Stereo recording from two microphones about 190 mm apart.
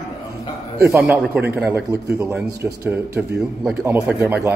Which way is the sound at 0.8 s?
10° right (ahead or behind).